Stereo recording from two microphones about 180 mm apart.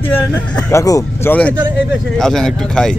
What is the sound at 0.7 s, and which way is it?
Speech, 15° left (ahead or behind).